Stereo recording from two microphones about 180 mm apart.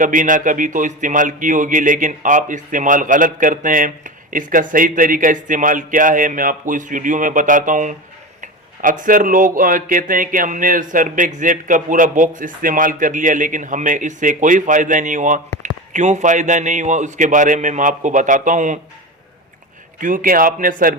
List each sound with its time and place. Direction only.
0.0 s a man's voice: 45° right (ahead or behind)
20.0 s a man's voice: 50° right (ahead or behind)